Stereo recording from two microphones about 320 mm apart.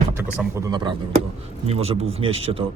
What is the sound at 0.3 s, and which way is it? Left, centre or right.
A man's voice, centre.